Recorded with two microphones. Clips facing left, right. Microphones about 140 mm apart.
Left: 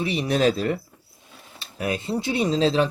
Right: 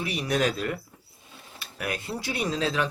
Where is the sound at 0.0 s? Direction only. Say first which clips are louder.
Left 5 dB; 25° left (ahead or behind).